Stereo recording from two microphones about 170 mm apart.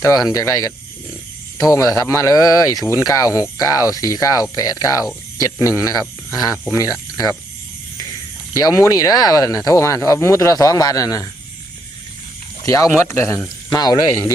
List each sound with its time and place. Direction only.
0.0 s speech: 20° left (ahead or behind)
8.5 s speech: 20° left (ahead or behind)
12.6 s speech: 20° left (ahead or behind)